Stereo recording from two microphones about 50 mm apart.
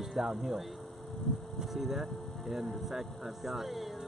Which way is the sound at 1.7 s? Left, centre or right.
Centre.